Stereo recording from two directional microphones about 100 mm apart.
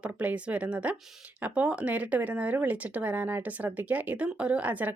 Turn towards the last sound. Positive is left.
turn(degrees=-15)  # may be behind; listen again after turning